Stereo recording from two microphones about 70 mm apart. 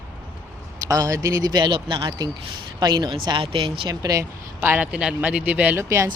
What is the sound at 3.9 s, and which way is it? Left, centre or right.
Speech, right.